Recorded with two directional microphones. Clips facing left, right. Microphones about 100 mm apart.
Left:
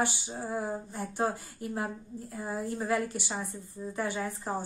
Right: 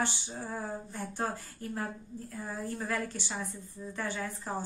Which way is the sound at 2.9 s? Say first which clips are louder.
Left 4 dB; 15° left (ahead or behind).